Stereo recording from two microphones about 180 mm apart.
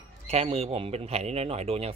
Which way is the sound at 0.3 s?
35° right (ahead or behind).